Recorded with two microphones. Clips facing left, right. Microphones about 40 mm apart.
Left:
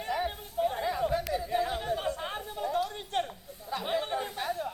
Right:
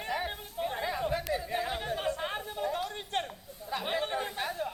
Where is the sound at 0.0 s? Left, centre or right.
Centre.